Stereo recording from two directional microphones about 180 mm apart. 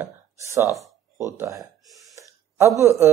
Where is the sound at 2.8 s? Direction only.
15° right (ahead or behind).